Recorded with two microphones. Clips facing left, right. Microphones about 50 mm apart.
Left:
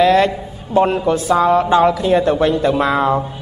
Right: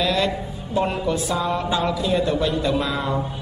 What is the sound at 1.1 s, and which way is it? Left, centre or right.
A woman's voice, left.